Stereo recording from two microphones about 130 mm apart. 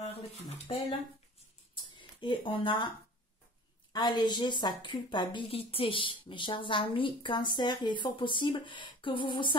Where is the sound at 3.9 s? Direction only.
35° left (ahead or behind).